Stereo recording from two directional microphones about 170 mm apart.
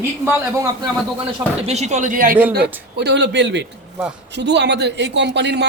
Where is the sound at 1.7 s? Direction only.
40° right (ahead or behind).